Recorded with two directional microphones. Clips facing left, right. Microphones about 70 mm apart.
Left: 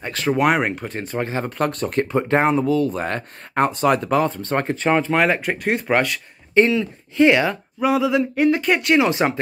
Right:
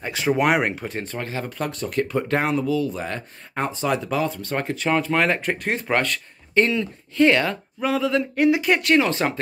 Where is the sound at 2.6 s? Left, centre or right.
Left.